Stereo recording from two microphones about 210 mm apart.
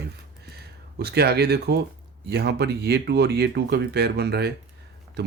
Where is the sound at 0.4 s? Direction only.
50° right (ahead or behind).